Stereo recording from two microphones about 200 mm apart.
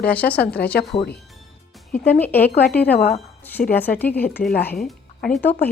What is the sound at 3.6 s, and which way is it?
Speech, 40° left (ahead or behind).